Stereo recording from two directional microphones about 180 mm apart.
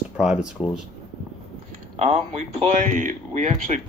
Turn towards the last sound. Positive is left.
turn(degrees=-40)  # may be behind; listen again after turning